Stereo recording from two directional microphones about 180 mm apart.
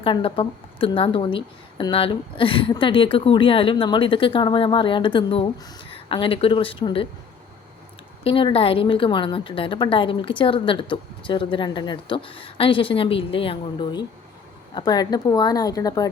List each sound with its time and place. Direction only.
0.0 s a woman's voice: 30° left (ahead or behind)
8.2 s a woman's voice: 30° left (ahead or behind)